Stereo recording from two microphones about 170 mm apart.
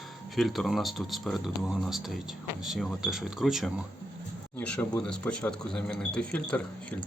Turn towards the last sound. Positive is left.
turn(degrees=10)  # may be behind; listen again after turning